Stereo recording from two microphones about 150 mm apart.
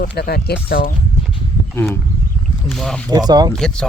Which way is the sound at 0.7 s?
70° left (ahead or behind).